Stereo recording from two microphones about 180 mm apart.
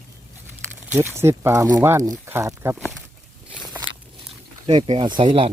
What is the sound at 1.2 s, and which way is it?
Speech, 15° right (ahead or behind).